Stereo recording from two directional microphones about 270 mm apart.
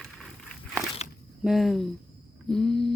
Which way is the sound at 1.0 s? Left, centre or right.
Left.